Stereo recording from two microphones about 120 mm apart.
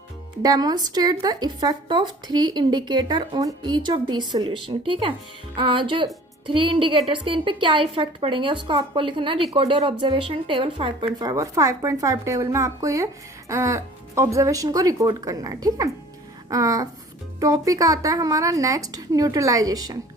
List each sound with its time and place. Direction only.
0.4 s speech: 35° right (ahead or behind)